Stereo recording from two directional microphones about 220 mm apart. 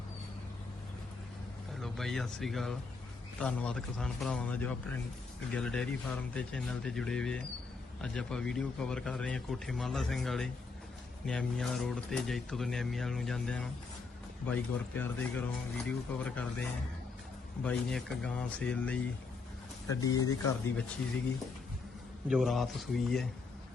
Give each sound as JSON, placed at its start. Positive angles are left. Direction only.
{"t": 1.8, "sound": "speech", "side_deg": 0}
{"t": 17.6, "sound": "speech", "side_deg": 5}
{"t": 19.9, "sound": "speech", "side_deg": 15}
{"t": 20.7, "sound": "speech", "side_deg": 5}
{"t": 22.3, "sound": "speech", "side_deg": 0}